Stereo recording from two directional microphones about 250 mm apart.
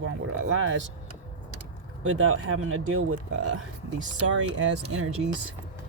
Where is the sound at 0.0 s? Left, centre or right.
Right.